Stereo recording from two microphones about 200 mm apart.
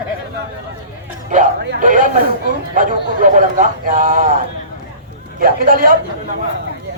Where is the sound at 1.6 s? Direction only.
55° right (ahead or behind).